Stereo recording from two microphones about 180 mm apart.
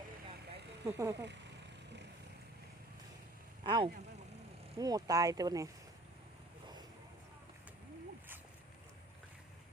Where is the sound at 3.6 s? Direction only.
25° right (ahead or behind).